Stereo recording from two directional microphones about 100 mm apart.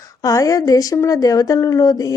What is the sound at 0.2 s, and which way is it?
Speech, 35° left (ahead or behind).